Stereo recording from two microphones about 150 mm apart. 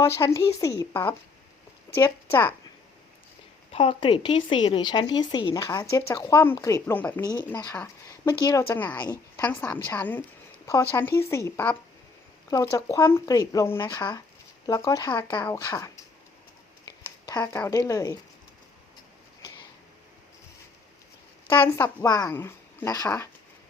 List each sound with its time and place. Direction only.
0.0 s speech: 20° left (ahead or behind)
3.7 s speech: 40° left (ahead or behind); by 7.2 s 10° left (ahead or behind)
7.2 s speech: 25° left (ahead or behind)
8.8 s speech: 10° left (ahead or behind)
12.5 s speech: 25° left (ahead or behind)
16.8 s a sound: 25° left (ahead or behind)
17.5 s speech: 15° left (ahead or behind)
22.0 s speech: 25° left (ahead or behind)